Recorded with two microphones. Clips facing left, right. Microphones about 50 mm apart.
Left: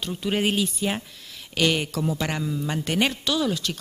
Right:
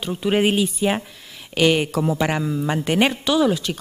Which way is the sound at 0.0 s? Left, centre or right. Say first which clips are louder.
Right 5 dB; centre.